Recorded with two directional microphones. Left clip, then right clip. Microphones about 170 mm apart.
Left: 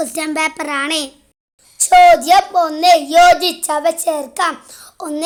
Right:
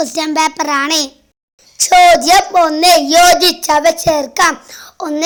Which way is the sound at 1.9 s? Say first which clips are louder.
Right 1 dB; 30° right (ahead or behind).